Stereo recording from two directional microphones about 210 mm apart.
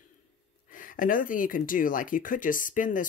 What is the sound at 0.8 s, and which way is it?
Speech, 40° left (ahead or behind).